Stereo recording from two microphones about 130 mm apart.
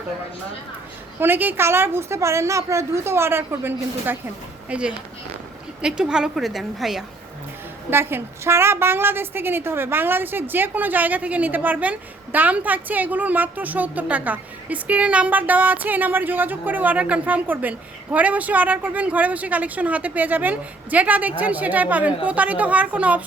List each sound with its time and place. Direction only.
1.2 s a woman's voice: 15° right (ahead or behind)
7.9 s a woman's voice: 15° right (ahead or behind)